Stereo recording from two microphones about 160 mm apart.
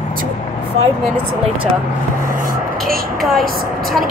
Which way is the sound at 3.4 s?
65° right (ahead or behind).